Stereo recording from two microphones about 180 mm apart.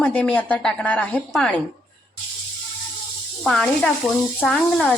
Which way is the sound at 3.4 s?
5° left (ahead or behind).